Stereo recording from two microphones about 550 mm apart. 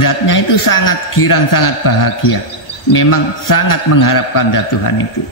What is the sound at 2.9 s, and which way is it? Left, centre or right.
A man's voice, left.